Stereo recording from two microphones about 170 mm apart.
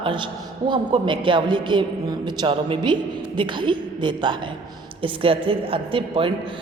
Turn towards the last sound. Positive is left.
turn(degrees=-30)  # may be behind; listen again after turning